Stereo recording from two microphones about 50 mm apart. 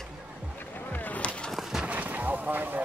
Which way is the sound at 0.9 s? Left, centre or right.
Left.